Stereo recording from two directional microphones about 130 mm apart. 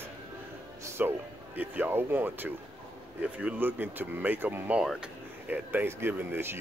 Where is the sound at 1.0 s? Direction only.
10° right (ahead or behind).